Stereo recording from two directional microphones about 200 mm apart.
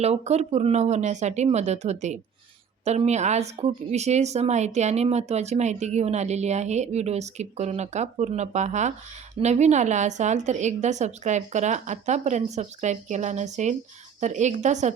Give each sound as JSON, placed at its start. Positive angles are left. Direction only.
{"t": 0.0, "sound": "speech", "side_deg": -30}